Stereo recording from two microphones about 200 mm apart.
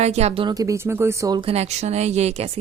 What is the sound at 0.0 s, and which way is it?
A woman's voice, 35° right (ahead or behind).